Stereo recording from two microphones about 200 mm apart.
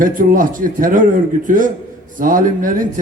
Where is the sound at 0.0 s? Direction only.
45° right (ahead or behind).